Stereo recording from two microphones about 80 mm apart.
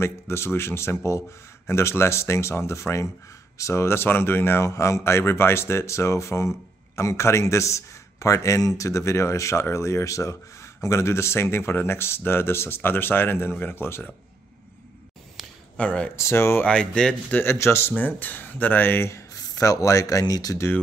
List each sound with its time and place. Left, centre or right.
0.0 s a man's voice: left
15.8 s speech: centre
16.2 s a man's voice: left
16.6 s speech: centre
17.4 s a man's voice: left